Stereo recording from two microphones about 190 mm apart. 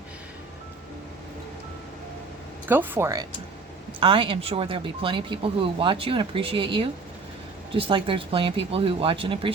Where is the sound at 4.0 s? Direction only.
25° right (ahead or behind).